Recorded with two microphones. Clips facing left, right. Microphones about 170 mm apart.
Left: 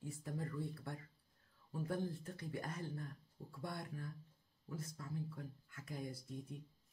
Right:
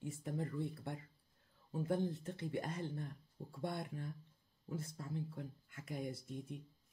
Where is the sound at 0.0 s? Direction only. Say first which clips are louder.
Right 3 dB; 25° right (ahead or behind).